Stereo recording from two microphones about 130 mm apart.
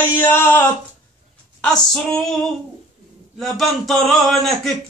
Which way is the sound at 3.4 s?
Centre (ahead or behind).